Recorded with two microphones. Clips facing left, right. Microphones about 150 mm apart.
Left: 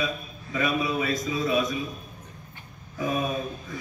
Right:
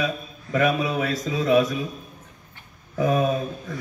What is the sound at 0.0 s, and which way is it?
A man's voice, 90° right.